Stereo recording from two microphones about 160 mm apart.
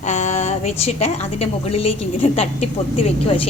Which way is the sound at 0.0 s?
50° left (ahead or behind).